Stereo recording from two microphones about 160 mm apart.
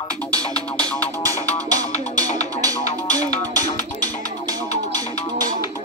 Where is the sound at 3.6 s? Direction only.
50° left (ahead or behind).